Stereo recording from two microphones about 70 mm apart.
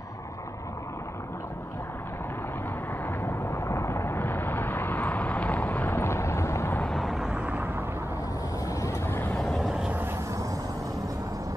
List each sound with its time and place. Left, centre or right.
3.1 s vehicle: left
7.0 s vehicle: centre
7.3 s vehicle: right
8.6 s vehicle: left
9.0 s vehicle: left
9.3 s vehicle: centre